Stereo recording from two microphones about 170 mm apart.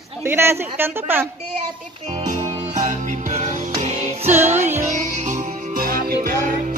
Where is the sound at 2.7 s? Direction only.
45° right (ahead or behind).